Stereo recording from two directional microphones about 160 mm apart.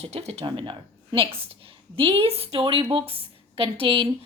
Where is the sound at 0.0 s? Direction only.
40° right (ahead or behind).